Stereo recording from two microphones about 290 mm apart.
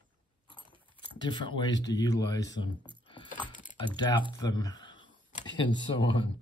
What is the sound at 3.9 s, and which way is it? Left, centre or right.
Speech, centre.